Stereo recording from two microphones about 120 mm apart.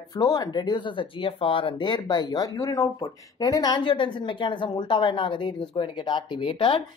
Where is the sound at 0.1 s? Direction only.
35° left (ahead or behind).